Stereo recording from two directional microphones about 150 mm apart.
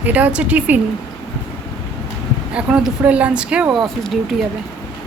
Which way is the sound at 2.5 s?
5° right (ahead or behind).